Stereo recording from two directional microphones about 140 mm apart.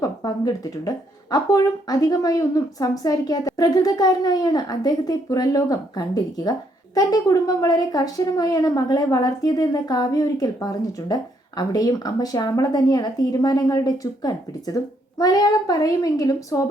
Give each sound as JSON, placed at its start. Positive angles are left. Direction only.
{"t": 0.0, "sound": "speech", "side_deg": 25}